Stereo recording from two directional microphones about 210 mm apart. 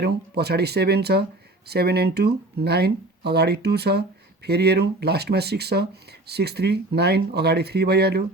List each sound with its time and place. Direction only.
0.0 s speech: 50° right (ahead or behind)